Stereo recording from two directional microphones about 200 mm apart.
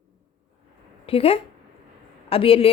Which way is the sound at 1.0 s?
30° left (ahead or behind).